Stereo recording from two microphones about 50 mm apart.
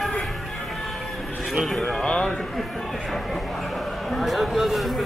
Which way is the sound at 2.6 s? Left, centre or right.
Centre.